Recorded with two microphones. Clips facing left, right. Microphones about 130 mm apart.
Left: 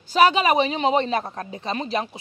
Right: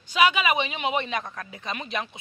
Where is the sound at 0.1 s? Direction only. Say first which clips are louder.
Left 5 dB; 40° left (ahead or behind).